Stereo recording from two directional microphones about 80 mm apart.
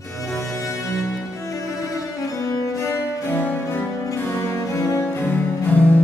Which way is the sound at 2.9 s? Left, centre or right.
Left.